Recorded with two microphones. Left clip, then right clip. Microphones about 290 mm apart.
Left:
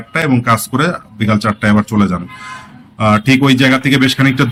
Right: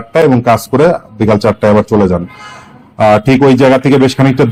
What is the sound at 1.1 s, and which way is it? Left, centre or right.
Speech, centre.